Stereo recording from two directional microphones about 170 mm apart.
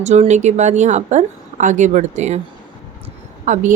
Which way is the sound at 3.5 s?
45° right (ahead or behind).